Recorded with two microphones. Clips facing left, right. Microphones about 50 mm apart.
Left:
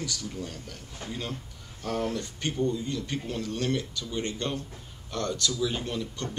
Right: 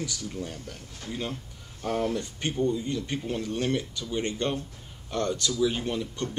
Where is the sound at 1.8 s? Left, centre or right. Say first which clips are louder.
Right 2 dB; centre.